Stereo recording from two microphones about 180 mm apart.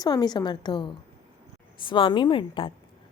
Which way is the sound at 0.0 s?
25° left (ahead or behind).